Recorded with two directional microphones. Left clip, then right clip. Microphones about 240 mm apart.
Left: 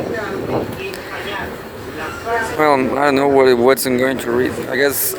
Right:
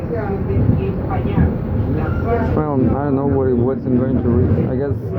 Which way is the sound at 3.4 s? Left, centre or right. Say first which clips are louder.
Left 6 dB; left.